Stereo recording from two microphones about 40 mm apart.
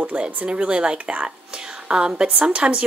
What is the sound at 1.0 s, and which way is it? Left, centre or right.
Speech, right.